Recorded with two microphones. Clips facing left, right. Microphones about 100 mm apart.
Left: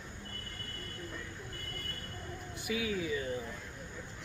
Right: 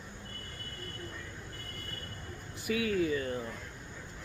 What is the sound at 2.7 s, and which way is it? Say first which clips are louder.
Speech: right 5 dB; 55° right (ahead or behind).